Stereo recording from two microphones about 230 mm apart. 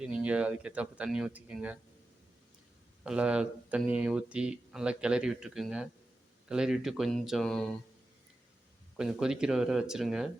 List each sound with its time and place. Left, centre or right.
0.0 s speech: centre
3.0 s speech: centre
9.0 s speech: centre